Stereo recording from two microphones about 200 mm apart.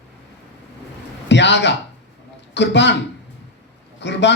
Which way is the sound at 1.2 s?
60° left (ahead or behind).